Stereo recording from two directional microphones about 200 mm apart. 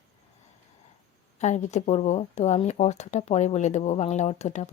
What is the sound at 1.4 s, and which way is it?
Speech, 35° left (ahead or behind).